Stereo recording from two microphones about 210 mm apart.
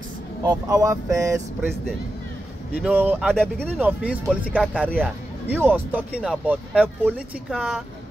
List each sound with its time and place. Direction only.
0.4 s speech: 15° right (ahead or behind)
2.8 s speech: 10° right (ahead or behind)
3.3 s speech: 5° left (ahead or behind)